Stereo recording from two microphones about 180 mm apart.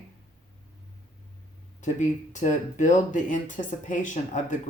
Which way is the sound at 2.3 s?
45° left (ahead or behind).